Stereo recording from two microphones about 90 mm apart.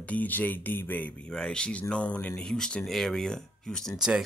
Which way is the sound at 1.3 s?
10° left (ahead or behind).